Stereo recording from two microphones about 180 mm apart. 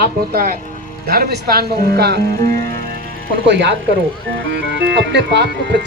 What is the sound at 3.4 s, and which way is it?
Speech, 75° right (ahead or behind).